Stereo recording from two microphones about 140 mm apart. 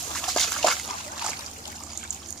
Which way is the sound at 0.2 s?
5° left (ahead or behind).